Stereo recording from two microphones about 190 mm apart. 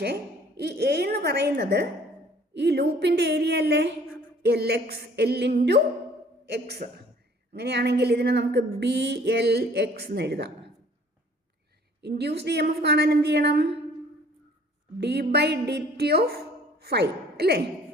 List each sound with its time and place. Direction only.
0.0 s speech: 60° right (ahead or behind)
11.9 s a woman's voice: 60° right (ahead or behind)
15.0 s a woman's voice: 60° right (ahead or behind)